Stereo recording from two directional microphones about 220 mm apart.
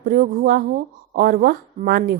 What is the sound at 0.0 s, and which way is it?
Speech, 40° right (ahead or behind).